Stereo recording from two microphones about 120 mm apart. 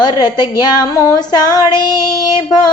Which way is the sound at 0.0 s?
35° left (ahead or behind).